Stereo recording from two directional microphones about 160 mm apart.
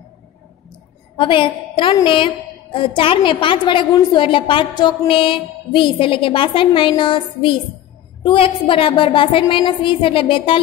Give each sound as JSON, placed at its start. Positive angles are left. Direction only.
{"t": 1.1, "sound": "a woman's voice", "side_deg": 30}